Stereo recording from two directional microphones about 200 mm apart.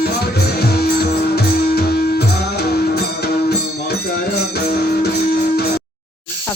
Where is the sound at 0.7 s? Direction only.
50° left (ahead or behind).